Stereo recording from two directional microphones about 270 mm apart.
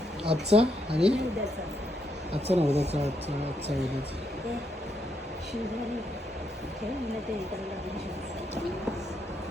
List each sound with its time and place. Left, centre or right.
0.3 s speech: right
0.9 s speech: centre
2.3 s speech: right